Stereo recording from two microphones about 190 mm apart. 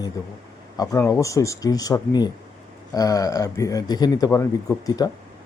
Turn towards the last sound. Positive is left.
turn(degrees=20)  # may be behind; listen again after turning